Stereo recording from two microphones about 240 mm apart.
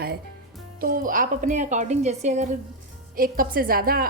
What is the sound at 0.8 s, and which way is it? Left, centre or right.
A woman's voice, right.